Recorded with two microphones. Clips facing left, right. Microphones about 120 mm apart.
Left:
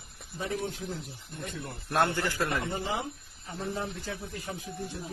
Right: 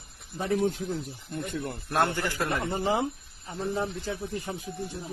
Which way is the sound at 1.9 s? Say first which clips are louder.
Even; 25° right (ahead or behind).